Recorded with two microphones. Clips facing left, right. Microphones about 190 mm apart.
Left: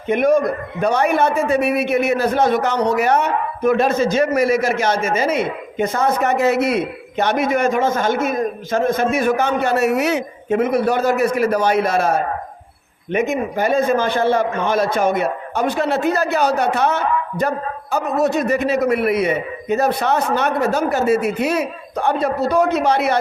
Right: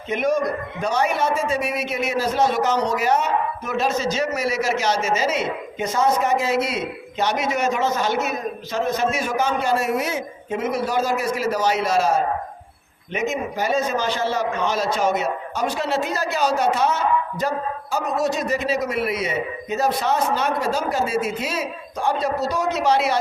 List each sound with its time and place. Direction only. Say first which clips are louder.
0.1 s a man's voice: left 6 dB; 55° left (ahead or behind)